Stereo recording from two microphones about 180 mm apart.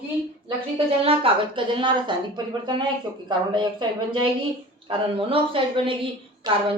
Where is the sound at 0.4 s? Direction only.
30° right (ahead or behind).